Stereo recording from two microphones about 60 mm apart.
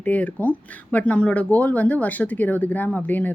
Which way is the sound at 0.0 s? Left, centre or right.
Left.